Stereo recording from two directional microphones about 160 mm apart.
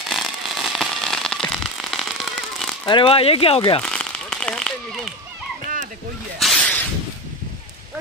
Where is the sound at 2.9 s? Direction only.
35° left (ahead or behind).